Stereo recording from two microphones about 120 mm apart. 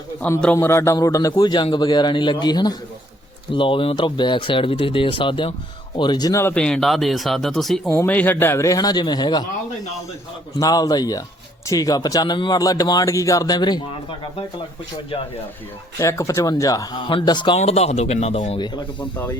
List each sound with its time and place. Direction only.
0.2 s a man's voice: 15° left (ahead or behind); by 5.5 s 45° left (ahead or behind)
6.0 s speech: 35° left (ahead or behind)
6.4 s speech: 10° left (ahead or behind)
8.0 s a man's voice: 15° left (ahead or behind); by 9.4 s 35° left (ahead or behind)
10.6 s speech: 30° left (ahead or behind)
16.0 s a man's voice: 25° left (ahead or behind)
17.1 s speech: 45° left (ahead or behind)
17.6 s speech: 65° left (ahead or behind)
18.6 s speech: 40° left (ahead or behind)